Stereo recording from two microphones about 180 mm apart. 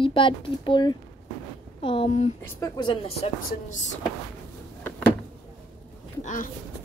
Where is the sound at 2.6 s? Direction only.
25° left (ahead or behind); by 4.0 s 40° left (ahead or behind).